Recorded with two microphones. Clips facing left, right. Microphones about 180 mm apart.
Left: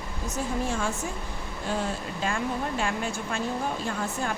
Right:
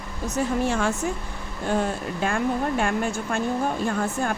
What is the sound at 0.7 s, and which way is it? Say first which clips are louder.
Speech: right 5 dB; 65° right (ahead or behind).